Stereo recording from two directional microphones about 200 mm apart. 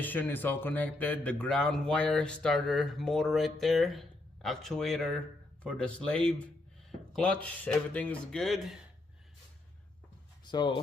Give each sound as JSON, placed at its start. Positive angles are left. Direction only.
{"t": 0.0, "sound": "speech", "side_deg": 10}
{"t": 10.4, "sound": "speech", "side_deg": 20}